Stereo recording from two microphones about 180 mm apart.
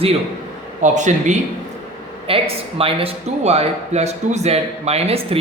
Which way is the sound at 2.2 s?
30° right (ahead or behind).